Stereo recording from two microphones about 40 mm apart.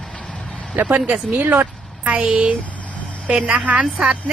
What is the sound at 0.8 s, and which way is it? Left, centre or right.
Speech, right.